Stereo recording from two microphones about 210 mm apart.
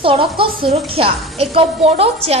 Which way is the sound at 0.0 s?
25° right (ahead or behind).